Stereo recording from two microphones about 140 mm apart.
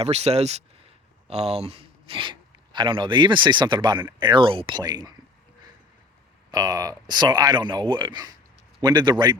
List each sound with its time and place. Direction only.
0.0 s speech: 50° right (ahead or behind); by 5.1 s 30° right (ahead or behind)
6.5 s speech: 25° right (ahead or behind)